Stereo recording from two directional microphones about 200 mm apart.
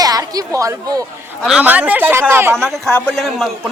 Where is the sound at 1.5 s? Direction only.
5° right (ahead or behind).